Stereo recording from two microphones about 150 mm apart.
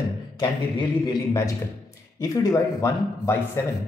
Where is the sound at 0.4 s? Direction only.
30° left (ahead or behind).